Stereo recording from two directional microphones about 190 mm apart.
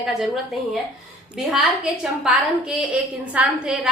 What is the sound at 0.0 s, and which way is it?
Speech, centre (ahead or behind).